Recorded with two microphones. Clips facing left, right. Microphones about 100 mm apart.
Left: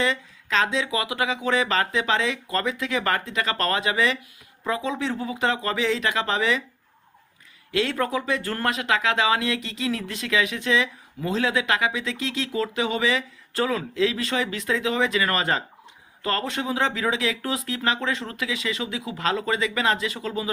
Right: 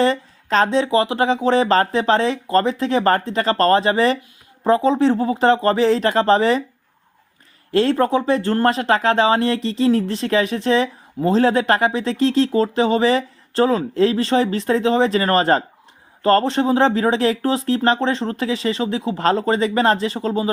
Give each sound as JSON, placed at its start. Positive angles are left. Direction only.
{"t": 0.0, "sound": "speech", "side_deg": -40}
{"t": 7.7, "sound": "speech", "side_deg": -35}